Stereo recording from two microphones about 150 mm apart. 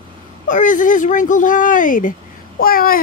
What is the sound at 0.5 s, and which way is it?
Speech, 60° left (ahead or behind).